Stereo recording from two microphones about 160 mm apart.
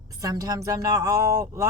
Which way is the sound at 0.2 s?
20° right (ahead or behind).